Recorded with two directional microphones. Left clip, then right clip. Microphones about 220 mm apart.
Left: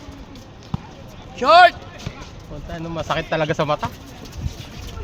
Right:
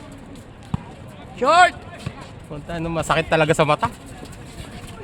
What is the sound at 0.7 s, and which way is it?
Basketball bounce, 25° right (ahead or behind).